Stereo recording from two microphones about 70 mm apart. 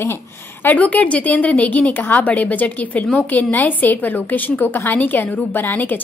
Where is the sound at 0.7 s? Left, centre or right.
Left.